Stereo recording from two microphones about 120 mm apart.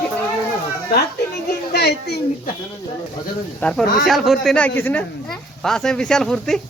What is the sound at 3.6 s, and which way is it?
Speech, centre (ahead or behind).